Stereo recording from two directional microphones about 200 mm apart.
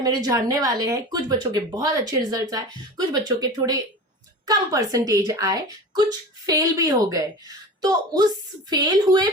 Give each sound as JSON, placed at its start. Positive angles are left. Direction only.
{"t": 0.0, "sound": "a woman's voice", "side_deg": -20}